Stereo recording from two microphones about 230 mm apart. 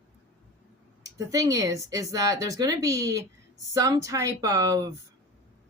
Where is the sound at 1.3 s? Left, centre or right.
Centre.